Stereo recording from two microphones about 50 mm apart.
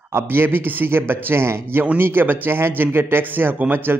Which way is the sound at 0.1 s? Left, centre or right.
Right.